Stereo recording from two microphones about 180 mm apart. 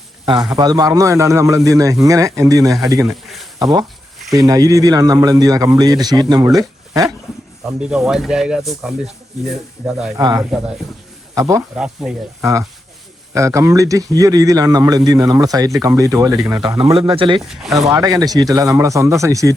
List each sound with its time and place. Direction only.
0.5 s a man's voice: 20° right (ahead or behind)
3.1 s a sound: centre (ahead or behind)
3.6 s a man's voice: 20° right (ahead or behind)
7.8 s speech: 5° right (ahead or behind)
10.2 s a man's voice: 20° right (ahead or behind)
10.5 s speech: 5° right (ahead or behind)
11.3 s speech: 20° right (ahead or behind)
11.8 s speech: 5° right (ahead or behind)
12.4 s a man's voice: 15° right (ahead or behind)
17.5 s speech: centre (ahead or behind)
17.7 s a man's voice: 20° right (ahead or behind)